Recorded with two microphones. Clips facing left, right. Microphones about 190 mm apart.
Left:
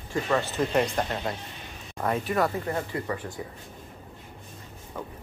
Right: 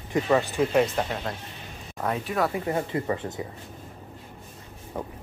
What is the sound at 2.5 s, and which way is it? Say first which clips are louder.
Speech: right 3 dB; 20° right (ahead or behind).